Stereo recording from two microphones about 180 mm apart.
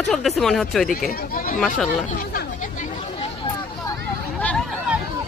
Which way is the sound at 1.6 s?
Centre (ahead or behind).